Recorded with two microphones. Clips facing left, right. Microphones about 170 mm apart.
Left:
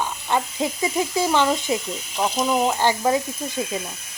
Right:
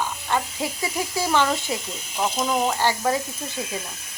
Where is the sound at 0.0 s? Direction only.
20° left (ahead or behind).